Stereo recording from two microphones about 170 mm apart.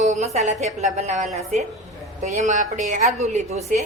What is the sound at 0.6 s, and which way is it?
A woman's voice, 40° right (ahead or behind).